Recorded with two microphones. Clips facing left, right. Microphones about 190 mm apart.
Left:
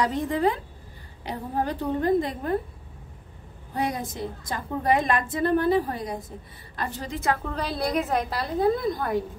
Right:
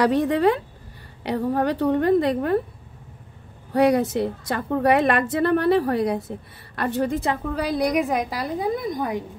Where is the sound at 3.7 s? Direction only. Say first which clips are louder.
Right 11 dB; 70° right (ahead or behind).